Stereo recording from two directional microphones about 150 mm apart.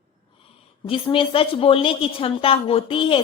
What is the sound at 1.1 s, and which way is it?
A woman's voice, 35° left (ahead or behind).